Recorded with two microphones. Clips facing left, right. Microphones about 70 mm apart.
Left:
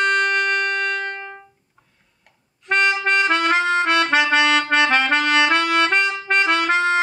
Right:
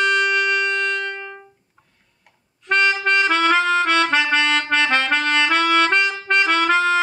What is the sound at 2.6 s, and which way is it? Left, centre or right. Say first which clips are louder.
Harmonica: right 1 dB; centre.